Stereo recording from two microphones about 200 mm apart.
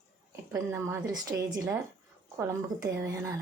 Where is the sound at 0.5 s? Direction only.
15° right (ahead or behind).